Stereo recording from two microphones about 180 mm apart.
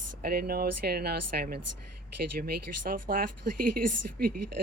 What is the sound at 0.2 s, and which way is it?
Speech, 60° right (ahead or behind).